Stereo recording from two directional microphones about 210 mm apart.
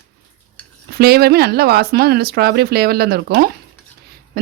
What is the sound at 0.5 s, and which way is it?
A woman's voice, 50° right (ahead or behind).